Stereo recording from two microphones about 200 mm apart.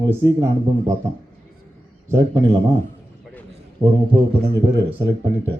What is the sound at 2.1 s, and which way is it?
Speech, 15° right (ahead or behind).